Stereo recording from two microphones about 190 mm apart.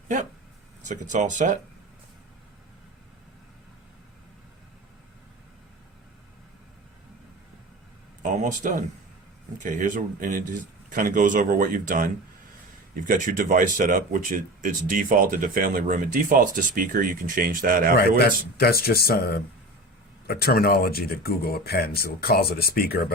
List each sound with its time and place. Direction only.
0.8 s speech: 40° right (ahead or behind)
8.2 s speech: 40° right (ahead or behind)
18.5 s speech: 55° left (ahead or behind)